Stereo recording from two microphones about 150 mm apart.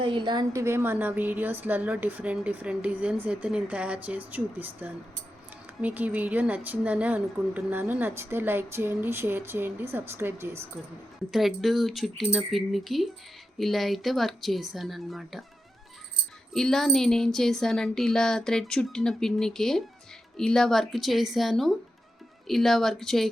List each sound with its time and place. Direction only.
0.0 s a woman's voice: 30° right (ahead or behind)
0.5 s a woman's voice: 15° right (ahead or behind)
11.3 s a woman's voice: centre (ahead or behind)
16.5 s a woman's voice: 5° left (ahead or behind)